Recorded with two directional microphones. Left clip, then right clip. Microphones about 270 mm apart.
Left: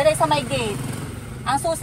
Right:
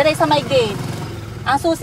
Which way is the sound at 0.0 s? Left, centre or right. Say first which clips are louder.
Right 3 dB; right.